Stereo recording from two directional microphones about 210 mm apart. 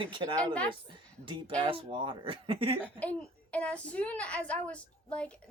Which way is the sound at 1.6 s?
25° right (ahead or behind).